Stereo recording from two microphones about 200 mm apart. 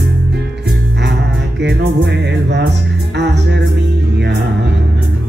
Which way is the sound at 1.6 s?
60° right (ahead or behind).